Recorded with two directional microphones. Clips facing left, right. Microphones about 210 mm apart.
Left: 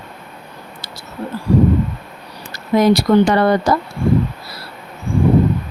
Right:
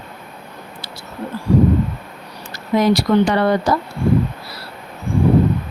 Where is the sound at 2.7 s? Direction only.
45° left (ahead or behind).